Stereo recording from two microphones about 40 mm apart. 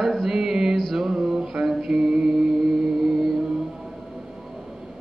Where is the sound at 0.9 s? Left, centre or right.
Centre.